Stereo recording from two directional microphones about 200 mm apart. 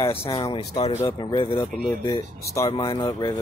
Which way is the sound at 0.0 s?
30° left (ahead or behind).